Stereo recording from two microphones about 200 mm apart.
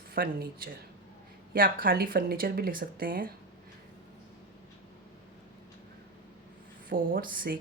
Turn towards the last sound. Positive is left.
turn(degrees=-45)  # may be behind; listen again after turning